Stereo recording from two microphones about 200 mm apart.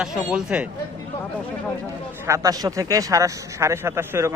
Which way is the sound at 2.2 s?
15° right (ahead or behind).